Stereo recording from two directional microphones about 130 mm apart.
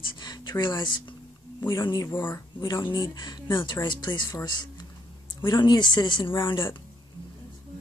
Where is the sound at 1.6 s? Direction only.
20° left (ahead or behind).